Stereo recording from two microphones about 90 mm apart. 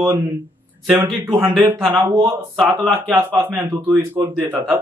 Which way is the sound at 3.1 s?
25° right (ahead or behind).